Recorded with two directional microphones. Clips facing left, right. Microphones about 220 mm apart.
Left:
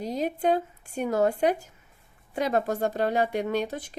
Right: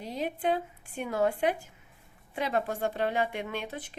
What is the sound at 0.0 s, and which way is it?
Speech, 40° left (ahead or behind).